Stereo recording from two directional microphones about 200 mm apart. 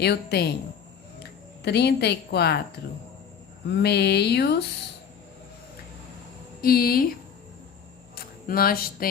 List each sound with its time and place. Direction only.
0.0 s a woman's voice: 55° left (ahead or behind)
3.7 s speech: 55° left (ahead or behind)
6.6 s a woman's voice: 45° left (ahead or behind)
8.1 s a sound: 45° left (ahead or behind)